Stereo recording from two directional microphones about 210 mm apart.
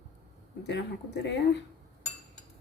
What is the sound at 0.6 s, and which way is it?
Speech, 55° left (ahead or behind).